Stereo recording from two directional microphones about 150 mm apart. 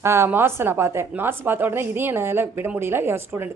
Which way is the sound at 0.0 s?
15° right (ahead or behind).